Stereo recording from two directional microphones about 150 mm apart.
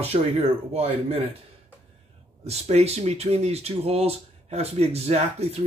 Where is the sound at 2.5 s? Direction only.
45° right (ahead or behind).